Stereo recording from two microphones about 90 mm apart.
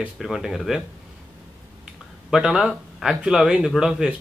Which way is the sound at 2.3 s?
5° right (ahead or behind).